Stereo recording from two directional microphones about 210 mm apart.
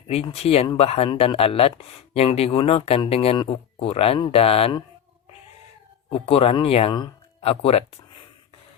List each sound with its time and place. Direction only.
0.1 s speech: 30° left (ahead or behind)
6.1 s speech: 25° left (ahead or behind)